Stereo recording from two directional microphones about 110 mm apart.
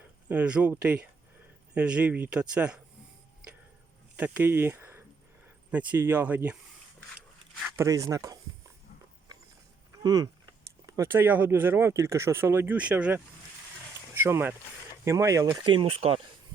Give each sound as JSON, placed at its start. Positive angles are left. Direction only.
{"t": 0.3, "sound": "speech", "side_deg": -10}
{"t": 4.2, "sound": "speech", "side_deg": -15}
{"t": 7.8, "sound": "speech", "side_deg": -30}
{"t": 10.0, "sound": "speech", "side_deg": -35}
{"t": 15.4, "sound": "speech", "side_deg": -45}